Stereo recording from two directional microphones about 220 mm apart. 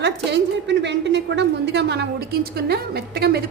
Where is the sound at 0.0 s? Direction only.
50° right (ahead or behind).